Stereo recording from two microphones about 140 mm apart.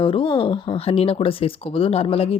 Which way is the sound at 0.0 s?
40° left (ahead or behind).